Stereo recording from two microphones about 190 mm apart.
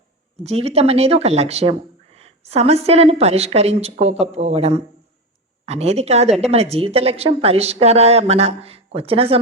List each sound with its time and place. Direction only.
0.4 s a woman's voice: 30° right (ahead or behind)